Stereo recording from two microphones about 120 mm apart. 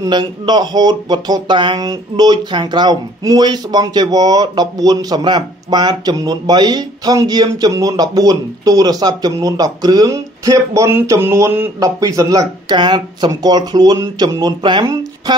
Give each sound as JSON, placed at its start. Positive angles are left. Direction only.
{"t": 0.0, "sound": "speech", "side_deg": -35}
{"t": 12.7, "sound": "speech", "side_deg": -40}